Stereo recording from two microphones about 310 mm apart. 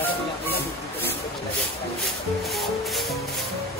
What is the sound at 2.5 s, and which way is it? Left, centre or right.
Music, centre.